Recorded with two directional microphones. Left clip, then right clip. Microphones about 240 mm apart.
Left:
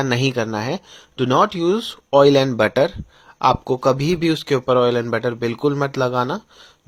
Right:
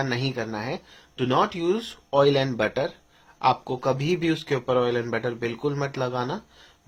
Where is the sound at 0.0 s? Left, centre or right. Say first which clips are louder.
Left 8 dB; left.